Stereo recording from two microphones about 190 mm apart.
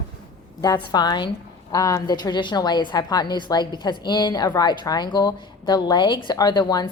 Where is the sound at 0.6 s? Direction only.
20° left (ahead or behind).